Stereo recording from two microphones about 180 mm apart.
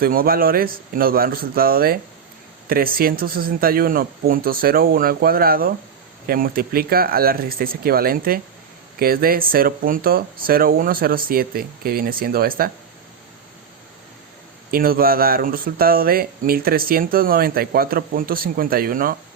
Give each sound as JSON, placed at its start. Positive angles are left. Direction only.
{"t": 0.0, "sound": "speech", "side_deg": -55}
{"t": 14.7, "sound": "speech", "side_deg": -55}